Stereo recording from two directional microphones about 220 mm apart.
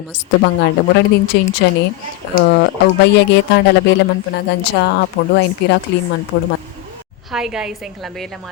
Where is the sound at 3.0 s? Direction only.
50° left (ahead or behind).